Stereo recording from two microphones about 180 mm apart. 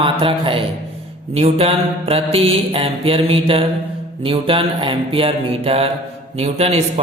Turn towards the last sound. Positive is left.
turn(degrees=-35)  # may be behind; listen again after turning